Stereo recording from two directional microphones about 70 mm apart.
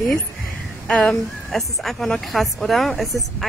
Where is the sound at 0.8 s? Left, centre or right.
Centre.